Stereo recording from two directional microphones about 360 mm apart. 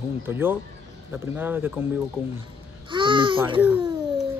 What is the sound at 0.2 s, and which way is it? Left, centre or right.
A woman's voice, centre.